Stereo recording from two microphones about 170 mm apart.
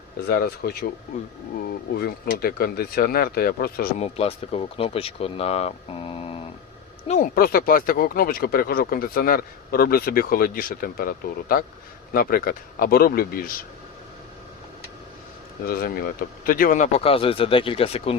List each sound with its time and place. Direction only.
0.3 s speech: 65° left (ahead or behind)
1.9 s speech: 65° left (ahead or behind)
3.9 s speech: 35° left (ahead or behind)
7.1 s speech: 55° left (ahead or behind)
15.6 s speech: 60° left (ahead or behind); by 18.2 s 35° left (ahead or behind)